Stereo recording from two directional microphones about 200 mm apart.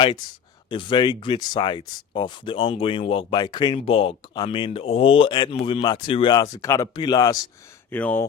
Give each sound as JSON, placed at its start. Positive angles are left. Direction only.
{"t": 0.7, "sound": "speech", "side_deg": 25}
{"t": 7.9, "sound": "speech", "side_deg": 10}